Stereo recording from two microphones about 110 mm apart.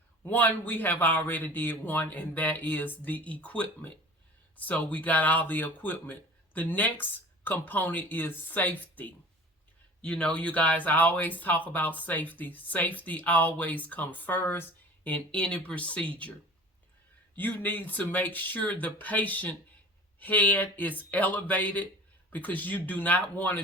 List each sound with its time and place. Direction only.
0.3 s speech: 15° left (ahead or behind)
17.3 s speech: 15° left (ahead or behind)